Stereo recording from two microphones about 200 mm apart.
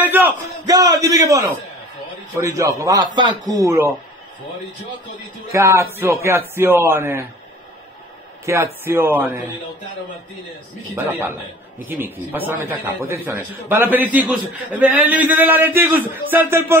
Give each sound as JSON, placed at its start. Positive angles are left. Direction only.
{"t": 0.0, "sound": "a sound", "side_deg": -10}
{"t": 0.7, "sound": "a man's voice", "side_deg": -20}
{"t": 5.5, "sound": "speech", "side_deg": -15}
{"t": 8.5, "sound": "speech", "side_deg": -15}
{"t": 11.8, "sound": "speech", "side_deg": -10}